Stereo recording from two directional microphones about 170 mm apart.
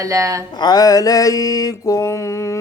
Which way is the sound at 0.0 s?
20° right (ahead or behind).